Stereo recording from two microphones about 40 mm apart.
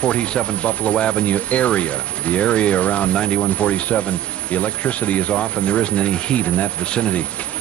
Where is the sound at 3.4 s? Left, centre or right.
Left.